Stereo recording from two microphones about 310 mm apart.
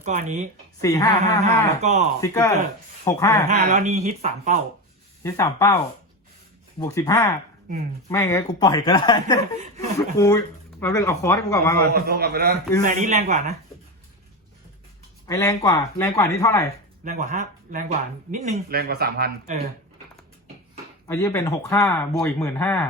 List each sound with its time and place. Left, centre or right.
0.0 s speech: right
0.8 s speech: centre
1.8 s speech: right
2.2 s speech: centre
3.4 s speech: right
5.2 s speech: centre
11.9 s speech: right
15.3 s speech: centre
17.0 s speech: right
21.1 s speech: centre